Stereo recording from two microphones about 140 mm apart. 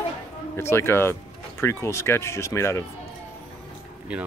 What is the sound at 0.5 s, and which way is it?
Speech, 15° left (ahead or behind).